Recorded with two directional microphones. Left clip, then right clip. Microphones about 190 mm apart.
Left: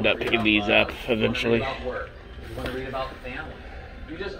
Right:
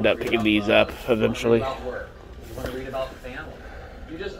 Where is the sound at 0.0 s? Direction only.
25° right (ahead or behind).